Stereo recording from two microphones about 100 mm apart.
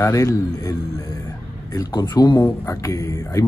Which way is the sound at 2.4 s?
30° left (ahead or behind).